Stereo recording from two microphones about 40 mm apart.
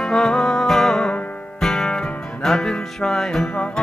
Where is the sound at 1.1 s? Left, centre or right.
Left.